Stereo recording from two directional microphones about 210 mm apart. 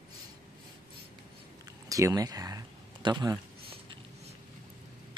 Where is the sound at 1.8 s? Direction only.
15° right (ahead or behind).